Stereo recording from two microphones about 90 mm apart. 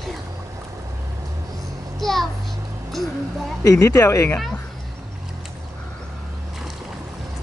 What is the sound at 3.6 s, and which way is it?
Speech, 35° left (ahead or behind).